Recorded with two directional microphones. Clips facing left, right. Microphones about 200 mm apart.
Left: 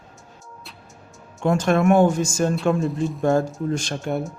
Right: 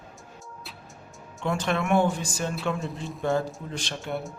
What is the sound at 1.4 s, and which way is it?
Speech, 45° left (ahead or behind).